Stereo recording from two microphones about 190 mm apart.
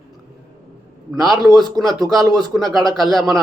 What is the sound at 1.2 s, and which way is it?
Speech, centre (ahead or behind).